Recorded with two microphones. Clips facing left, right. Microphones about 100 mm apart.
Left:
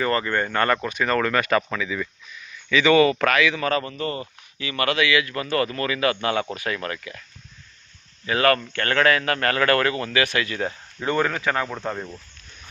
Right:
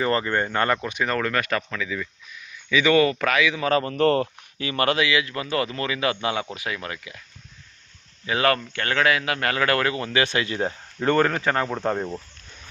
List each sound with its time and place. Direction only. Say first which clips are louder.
0.0 s a man's voice: even; 20° right (ahead or behind)
1.0 s speech: left 3 dB; centre (ahead or behind)
2.3 s a sound: left 1 dB; 10° right (ahead or behind)
2.9 s speech: left 3 dB; 5° left (ahead or behind)
3.2 s a man's voice: left 1 dB; 5° right (ahead or behind)
3.7 s speech: right 2 dB; 30° right (ahead or behind)
3.9 s speech: right 9 dB; 65° right (ahead or behind)
4.5 s a man's voice: right 1 dB; 35° right (ahead or behind); by 7.2 s 15° right (ahead or behind)
8.3 s a man's voice: left 2 dB; 20° right (ahead or behind)
11.0 s speech: right 3 dB; 45° right (ahead or behind)
11.3 s speech: right 1 dB; 30° right (ahead or behind)
11.6 s speech: right 4 dB; 20° right (ahead or behind)
11.9 s speech: right 5 dB; 30° right (ahead or behind)